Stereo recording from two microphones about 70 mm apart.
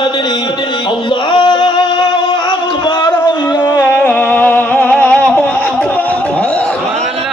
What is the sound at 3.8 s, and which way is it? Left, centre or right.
Music, centre.